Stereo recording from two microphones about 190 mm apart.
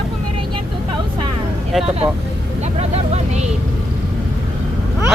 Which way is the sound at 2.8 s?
35° right (ahead or behind).